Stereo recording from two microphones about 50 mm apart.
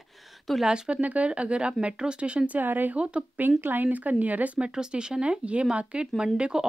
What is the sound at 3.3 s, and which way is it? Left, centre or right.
Speech, right.